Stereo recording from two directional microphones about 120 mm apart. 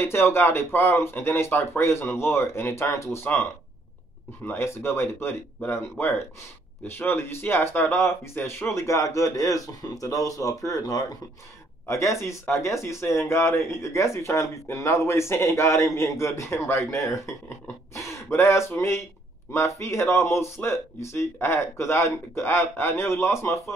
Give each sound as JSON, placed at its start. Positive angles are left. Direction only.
{"t": 0.0, "sound": "speech", "side_deg": 20}
{"t": 4.5, "sound": "speech", "side_deg": 20}